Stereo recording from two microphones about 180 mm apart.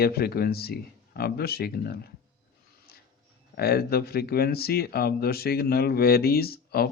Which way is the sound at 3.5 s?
60° left (ahead or behind).